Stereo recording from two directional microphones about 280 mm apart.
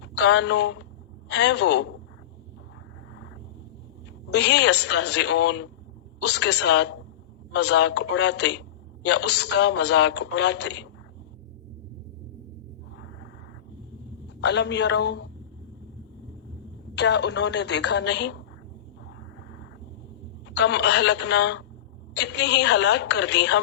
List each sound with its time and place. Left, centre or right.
0.1 s a man's voice: left
4.3 s a man's voice: left
14.4 s a man's voice: left
16.9 s a man's voice: left
20.6 s a man's voice: left